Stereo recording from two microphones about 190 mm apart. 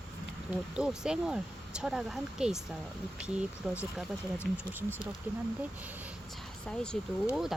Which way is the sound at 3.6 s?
Centre (ahead or behind).